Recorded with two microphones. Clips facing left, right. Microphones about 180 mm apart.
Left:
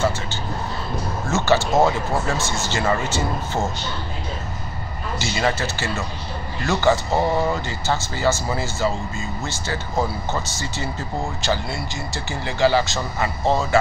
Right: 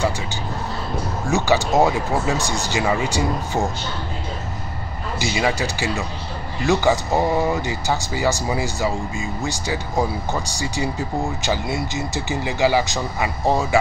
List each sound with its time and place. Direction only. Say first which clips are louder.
1.2 s speech: even; 15° right (ahead or behind)
5.2 s speech: right 1 dB; 10° right (ahead or behind)